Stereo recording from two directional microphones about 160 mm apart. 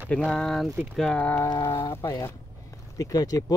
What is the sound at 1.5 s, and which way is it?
Speech, 30° left (ahead or behind).